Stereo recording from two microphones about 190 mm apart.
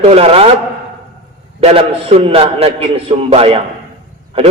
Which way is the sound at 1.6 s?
30° right (ahead or behind).